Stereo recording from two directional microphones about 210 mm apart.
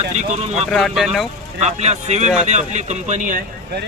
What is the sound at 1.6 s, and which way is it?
Speech, 30° right (ahead or behind).